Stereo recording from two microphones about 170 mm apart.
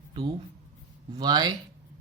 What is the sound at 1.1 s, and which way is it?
Speech, 25° right (ahead or behind).